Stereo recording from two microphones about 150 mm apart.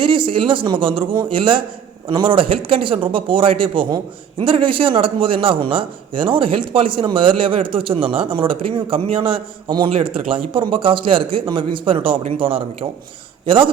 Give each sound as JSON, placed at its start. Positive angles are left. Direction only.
{"t": 0.0, "sound": "a man's voice", "side_deg": -35}